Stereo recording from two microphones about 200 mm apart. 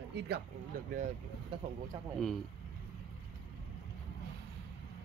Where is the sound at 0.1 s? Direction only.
55° right (ahead or behind).